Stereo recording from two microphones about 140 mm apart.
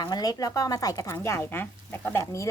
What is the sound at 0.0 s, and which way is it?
Speech, 25° left (ahead or behind).